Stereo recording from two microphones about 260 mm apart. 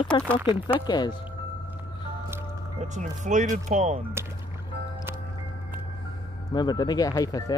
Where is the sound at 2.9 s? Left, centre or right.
Right.